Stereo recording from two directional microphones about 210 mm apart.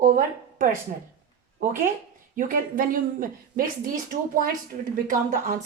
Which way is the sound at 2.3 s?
40° right (ahead or behind).